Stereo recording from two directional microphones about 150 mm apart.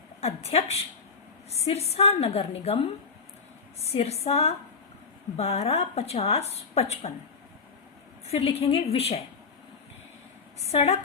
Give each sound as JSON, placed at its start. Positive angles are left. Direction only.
{"t": 0.2, "sound": "a woman's voice", "side_deg": 45}
{"t": 8.3, "sound": "a woman's voice", "side_deg": 40}
{"t": 10.7, "sound": "a woman's voice", "side_deg": 45}